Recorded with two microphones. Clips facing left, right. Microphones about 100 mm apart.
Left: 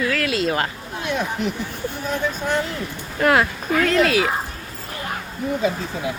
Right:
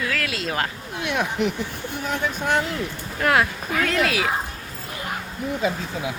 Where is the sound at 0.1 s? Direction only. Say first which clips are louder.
Left 5 dB; centre (ahead or behind).